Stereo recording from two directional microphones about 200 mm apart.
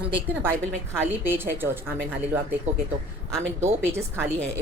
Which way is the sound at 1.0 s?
10° right (ahead or behind).